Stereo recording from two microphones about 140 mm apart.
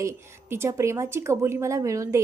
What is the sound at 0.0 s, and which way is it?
A woman's voice, 20° right (ahead or behind).